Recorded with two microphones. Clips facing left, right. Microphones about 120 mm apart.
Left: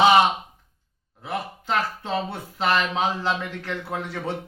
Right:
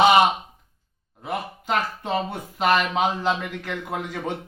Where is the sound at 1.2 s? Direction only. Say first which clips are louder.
Right 1 dB; 15° right (ahead or behind).